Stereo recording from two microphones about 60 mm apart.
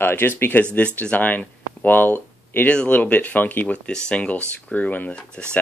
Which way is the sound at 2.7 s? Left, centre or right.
Left.